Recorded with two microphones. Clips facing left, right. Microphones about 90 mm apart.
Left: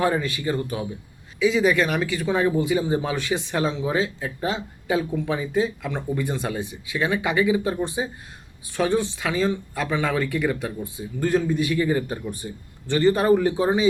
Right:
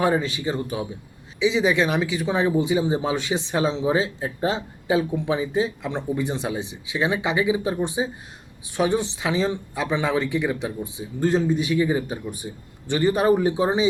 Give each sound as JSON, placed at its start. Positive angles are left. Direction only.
{"t": 0.0, "sound": "speech", "side_deg": -20}